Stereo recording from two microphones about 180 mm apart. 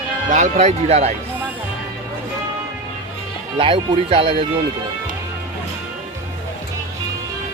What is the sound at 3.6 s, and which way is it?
Speech, 30° right (ahead or behind).